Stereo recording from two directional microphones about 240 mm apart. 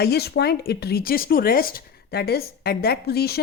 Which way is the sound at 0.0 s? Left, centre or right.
Left.